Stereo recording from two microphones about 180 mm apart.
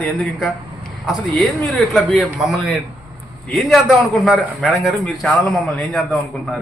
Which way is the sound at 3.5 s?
Centre (ahead or behind).